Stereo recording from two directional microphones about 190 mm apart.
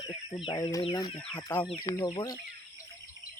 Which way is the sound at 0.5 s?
20° left (ahead or behind).